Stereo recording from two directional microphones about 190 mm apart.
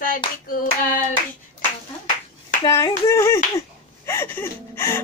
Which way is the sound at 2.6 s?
15° left (ahead or behind).